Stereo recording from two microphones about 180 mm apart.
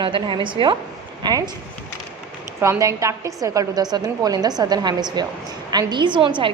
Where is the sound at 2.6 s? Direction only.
15° right (ahead or behind).